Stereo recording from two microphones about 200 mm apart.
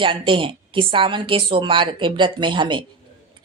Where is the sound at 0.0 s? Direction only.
25° right (ahead or behind).